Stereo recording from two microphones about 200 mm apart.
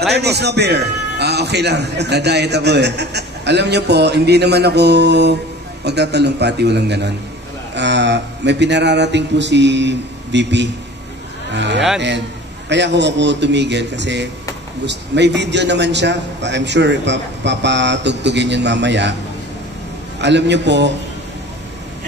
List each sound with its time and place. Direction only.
0.1 s a man's voice: 55° right (ahead or behind)
20.2 s a man's voice: 60° right (ahead or behind)